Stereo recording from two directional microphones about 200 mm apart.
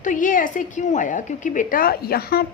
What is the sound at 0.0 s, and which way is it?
A woman's voice, 40° left (ahead or behind).